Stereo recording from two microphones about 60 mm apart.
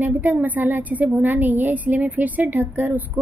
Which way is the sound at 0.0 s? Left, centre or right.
Right.